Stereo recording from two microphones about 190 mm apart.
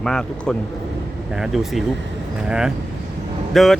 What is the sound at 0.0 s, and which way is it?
Speech, 5° left (ahead or behind).